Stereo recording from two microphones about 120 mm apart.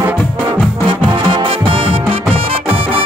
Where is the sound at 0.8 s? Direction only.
45° right (ahead or behind).